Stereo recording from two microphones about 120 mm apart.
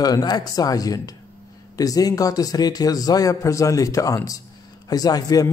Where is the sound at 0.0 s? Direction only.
35° left (ahead or behind).